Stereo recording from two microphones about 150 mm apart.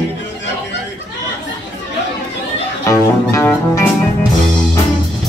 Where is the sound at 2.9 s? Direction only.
20° left (ahead or behind).